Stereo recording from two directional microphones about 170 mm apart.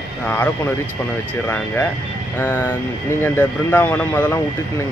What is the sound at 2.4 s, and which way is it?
Speech, 15° left (ahead or behind).